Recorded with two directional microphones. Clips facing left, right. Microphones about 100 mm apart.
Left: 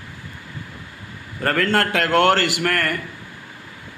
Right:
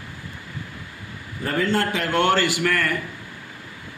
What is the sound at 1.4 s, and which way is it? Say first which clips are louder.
A man's voice: left 3 dB; 80° left.